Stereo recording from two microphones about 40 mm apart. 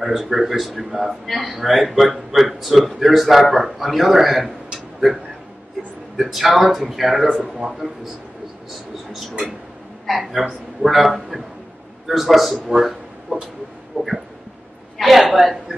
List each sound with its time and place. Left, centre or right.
0.0 s a man's voice: centre
4.7 s a sound: centre
6.1 s a man's voice: centre
10.0 s a man's voice: centre
14.0 s a sound: right
15.0 s a woman's voice: centre